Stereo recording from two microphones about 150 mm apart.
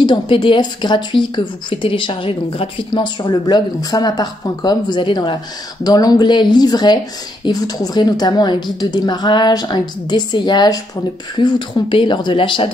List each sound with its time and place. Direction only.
0.0 s a woman's voice: 30° left (ahead or behind)